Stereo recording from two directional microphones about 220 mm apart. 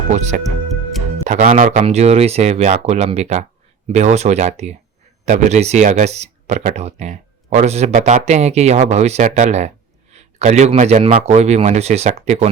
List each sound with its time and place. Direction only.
0.1 s speech: 35° right (ahead or behind)
1.8 s speech: 30° right (ahead or behind)